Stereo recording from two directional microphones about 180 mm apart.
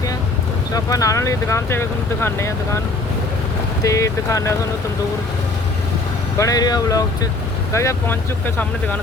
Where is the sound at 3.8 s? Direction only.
15° left (ahead or behind).